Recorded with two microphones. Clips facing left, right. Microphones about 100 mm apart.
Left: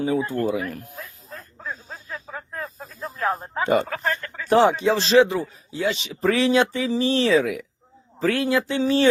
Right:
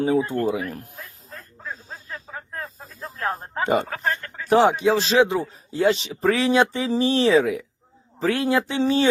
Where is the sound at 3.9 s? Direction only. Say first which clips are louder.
Even; 90° left.